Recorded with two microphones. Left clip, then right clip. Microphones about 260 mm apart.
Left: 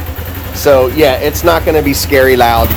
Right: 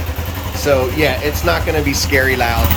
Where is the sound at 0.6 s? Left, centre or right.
Centre.